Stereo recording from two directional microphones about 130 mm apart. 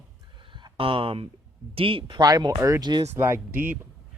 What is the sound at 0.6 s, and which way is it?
A man's voice, 40° right (ahead or behind).